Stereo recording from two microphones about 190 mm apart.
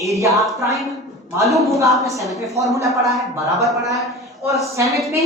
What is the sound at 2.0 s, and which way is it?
Speech, 15° right (ahead or behind).